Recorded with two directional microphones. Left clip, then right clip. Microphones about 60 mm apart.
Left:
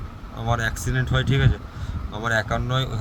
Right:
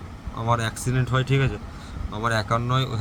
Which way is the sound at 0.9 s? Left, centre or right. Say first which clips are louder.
Right 2 dB; centre.